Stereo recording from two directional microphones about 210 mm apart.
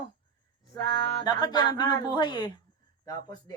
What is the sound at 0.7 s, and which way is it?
Speech, 20° left (ahead or behind).